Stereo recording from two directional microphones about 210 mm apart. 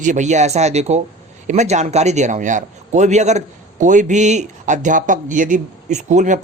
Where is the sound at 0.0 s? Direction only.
35° right (ahead or behind).